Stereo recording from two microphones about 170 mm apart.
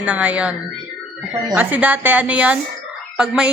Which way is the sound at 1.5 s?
10° right (ahead or behind).